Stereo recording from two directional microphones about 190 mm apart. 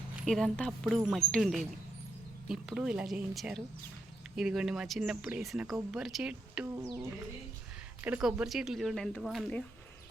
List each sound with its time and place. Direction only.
0.3 s speech: 5° left (ahead or behind)
6.7 s music: 15° right (ahead or behind)
8.0 s speech: 5° right (ahead or behind)